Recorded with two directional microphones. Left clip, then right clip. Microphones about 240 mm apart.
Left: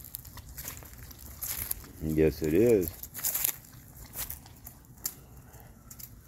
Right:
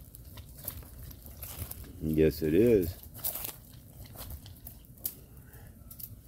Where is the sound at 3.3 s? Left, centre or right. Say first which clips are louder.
Left 7 dB; left.